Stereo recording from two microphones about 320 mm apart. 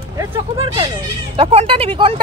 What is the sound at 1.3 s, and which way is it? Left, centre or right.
Speech, centre.